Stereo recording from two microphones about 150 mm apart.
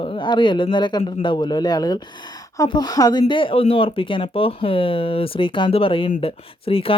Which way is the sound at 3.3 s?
35° left (ahead or behind).